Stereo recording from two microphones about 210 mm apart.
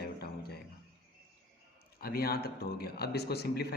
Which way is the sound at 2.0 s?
45° left (ahead or behind).